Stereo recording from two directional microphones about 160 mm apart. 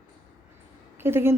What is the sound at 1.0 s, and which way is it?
Speech, 15° right (ahead or behind).